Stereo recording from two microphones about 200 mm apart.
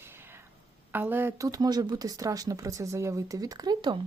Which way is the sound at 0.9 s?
10° right (ahead or behind).